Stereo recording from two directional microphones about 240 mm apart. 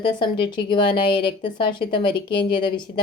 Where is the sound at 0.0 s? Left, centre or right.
Centre.